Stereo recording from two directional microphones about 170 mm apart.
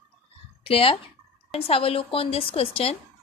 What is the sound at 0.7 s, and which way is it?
A woman's voice, 35° left (ahead or behind).